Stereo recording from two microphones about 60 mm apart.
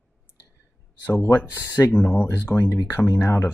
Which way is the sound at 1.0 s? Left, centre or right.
Left.